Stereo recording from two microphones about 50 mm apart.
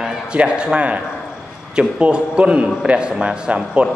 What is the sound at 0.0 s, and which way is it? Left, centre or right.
A man's voice, right.